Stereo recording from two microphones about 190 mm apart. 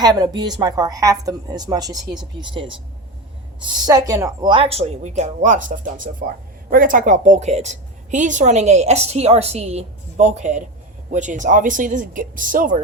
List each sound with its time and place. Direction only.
0.0 s a woman's voice: 20° right (ahead or behind); by 12.7 s 45° right (ahead or behind)